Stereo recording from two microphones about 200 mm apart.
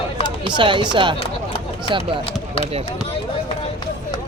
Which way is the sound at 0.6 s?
25° right (ahead or behind).